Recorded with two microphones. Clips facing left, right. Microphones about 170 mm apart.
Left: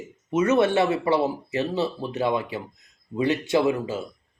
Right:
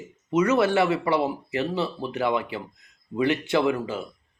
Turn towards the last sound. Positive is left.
turn(degrees=25)  # may be behind; listen again after turning